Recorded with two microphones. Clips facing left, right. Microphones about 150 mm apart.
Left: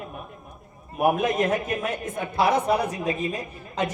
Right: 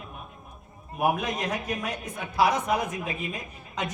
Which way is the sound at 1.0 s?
50° left (ahead or behind).